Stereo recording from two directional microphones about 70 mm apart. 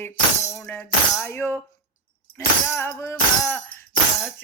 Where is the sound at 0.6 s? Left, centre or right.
Left.